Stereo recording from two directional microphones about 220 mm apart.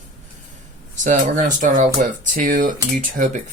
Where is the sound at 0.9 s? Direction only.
35° right (ahead or behind).